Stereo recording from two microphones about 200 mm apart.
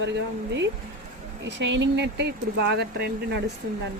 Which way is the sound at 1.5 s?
65° right (ahead or behind).